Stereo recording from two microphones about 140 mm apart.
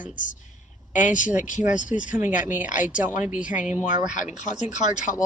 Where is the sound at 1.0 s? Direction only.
65° left (ahead or behind).